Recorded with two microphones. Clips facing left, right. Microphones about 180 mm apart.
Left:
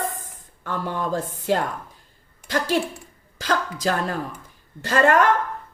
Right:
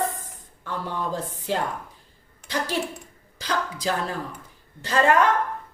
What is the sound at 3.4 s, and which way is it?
A woman's voice, 50° left (ahead or behind).